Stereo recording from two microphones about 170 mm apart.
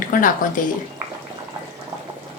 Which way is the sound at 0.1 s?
50° left (ahead or behind).